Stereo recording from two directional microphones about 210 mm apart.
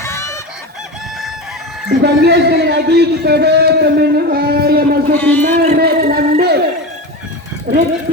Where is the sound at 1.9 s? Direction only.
50° right (ahead or behind).